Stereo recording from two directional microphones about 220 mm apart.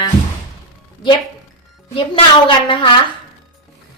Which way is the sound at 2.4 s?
25° left (ahead or behind).